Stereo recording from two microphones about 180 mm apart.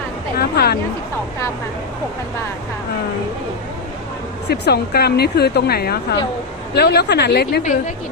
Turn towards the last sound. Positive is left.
turn(degrees=60)  # may be behind; listen again after turning